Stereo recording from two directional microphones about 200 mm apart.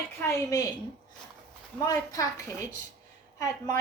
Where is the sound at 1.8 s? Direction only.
15° left (ahead or behind).